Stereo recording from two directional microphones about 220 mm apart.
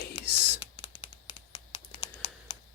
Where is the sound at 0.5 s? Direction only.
25° left (ahead or behind).